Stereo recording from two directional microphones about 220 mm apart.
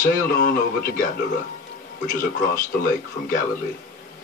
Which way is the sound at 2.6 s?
35° left (ahead or behind).